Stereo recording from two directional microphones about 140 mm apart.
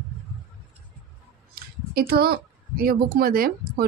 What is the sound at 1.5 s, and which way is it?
Speech, 90° right.